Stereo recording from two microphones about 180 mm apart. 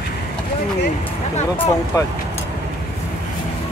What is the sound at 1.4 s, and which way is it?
Speech, 35° left (ahead or behind).